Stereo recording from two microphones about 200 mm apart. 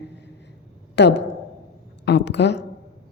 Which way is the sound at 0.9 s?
60° left (ahead or behind).